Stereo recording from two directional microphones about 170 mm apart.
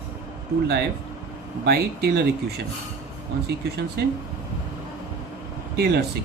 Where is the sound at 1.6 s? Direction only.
65° right (ahead or behind).